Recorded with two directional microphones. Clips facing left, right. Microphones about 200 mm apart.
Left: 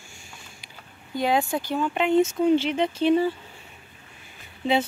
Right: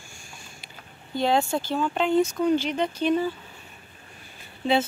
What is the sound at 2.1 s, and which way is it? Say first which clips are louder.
Speech: left 3 dB; 25° left (ahead or behind).